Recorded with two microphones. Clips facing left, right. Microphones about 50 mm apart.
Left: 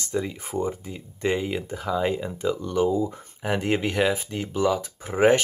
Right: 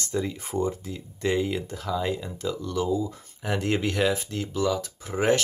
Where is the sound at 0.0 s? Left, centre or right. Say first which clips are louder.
Left 1 dB; centre.